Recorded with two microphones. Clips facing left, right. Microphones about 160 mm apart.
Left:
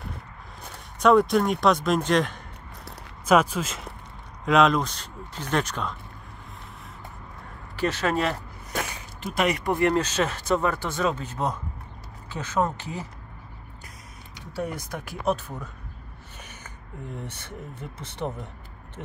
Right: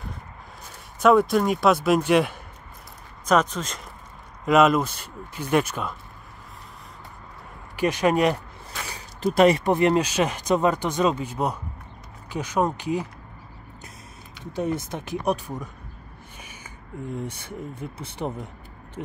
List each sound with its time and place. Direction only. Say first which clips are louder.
0.9 s speech: right 1 dB; centre (ahead or behind)
3.3 s speech: left 1 dB; 10° left (ahead or behind)
4.5 s speech: right 2 dB; 5° right (ahead or behind)
7.7 s speech: right 4 dB; 15° right (ahead or behind)
8.9 s a sound: right 7 dB; 35° right (ahead or behind)
9.7 s speech: right 3 dB; 20° right (ahead or behind)
14.5 s speech: right 4 dB; 25° right (ahead or behind)
17.3 s speech: right 4 dB; 10° right (ahead or behind)